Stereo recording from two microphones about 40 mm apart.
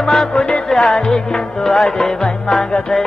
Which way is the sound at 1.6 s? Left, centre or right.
Centre.